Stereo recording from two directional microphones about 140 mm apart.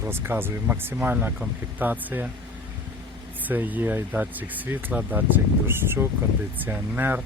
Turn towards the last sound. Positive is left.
turn(degrees=-15)  # may be behind; listen again after turning